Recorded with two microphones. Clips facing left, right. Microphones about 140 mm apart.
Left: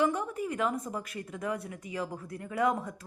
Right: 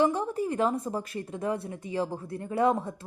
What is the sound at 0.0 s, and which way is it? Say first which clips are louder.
A woman's voice: right 4 dB; 30° right (ahead or behind).